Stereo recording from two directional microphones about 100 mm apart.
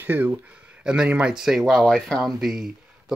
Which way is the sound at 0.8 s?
10° right (ahead or behind).